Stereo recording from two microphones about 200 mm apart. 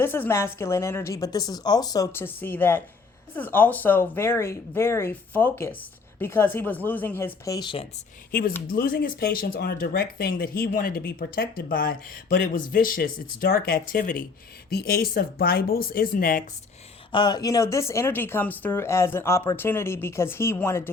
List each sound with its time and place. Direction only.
0.0 s speech: 10° left (ahead or behind)
8.3 s speech: 45° left (ahead or behind)
17.1 s speech: 20° left (ahead or behind)